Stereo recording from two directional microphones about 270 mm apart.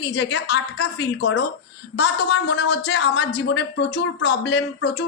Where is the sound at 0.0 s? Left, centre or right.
Left.